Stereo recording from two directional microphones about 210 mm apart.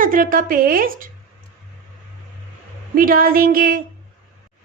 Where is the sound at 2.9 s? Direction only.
40° right (ahead or behind).